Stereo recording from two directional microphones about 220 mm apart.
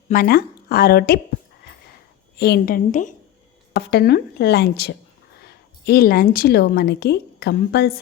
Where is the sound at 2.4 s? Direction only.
50° left (ahead or behind).